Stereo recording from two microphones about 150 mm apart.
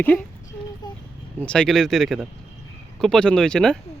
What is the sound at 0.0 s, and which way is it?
Speech, 10° left (ahead or behind).